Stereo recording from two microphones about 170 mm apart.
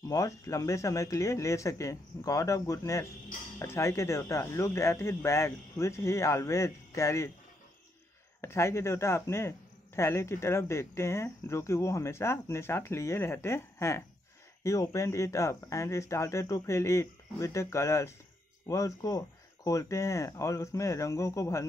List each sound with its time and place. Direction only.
0.0 s speech: 20° left (ahead or behind)
8.4 s speech: 15° left (ahead or behind)